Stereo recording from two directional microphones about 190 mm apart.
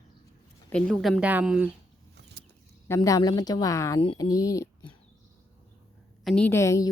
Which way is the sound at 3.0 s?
20° left (ahead or behind).